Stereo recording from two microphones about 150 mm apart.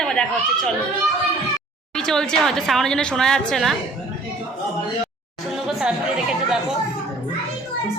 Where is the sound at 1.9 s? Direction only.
5° left (ahead or behind).